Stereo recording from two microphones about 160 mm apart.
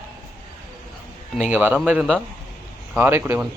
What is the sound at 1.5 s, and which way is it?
Speech, 10° right (ahead or behind).